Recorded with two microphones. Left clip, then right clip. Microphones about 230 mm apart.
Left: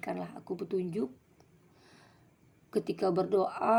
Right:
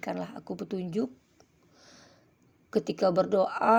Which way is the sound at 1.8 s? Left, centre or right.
Right.